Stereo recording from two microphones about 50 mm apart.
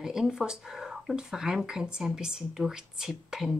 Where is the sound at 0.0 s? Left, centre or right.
Centre.